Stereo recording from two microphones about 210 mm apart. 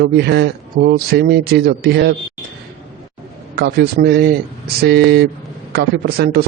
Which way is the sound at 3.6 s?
50° right (ahead or behind).